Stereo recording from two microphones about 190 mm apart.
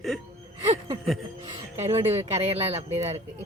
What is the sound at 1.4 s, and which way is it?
Speech, 35° right (ahead or behind).